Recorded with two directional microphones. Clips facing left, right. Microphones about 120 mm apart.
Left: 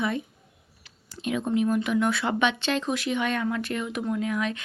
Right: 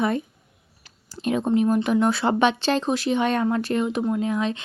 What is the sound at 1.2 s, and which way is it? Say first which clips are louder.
Speech: right 4 dB; 35° right (ahead or behind).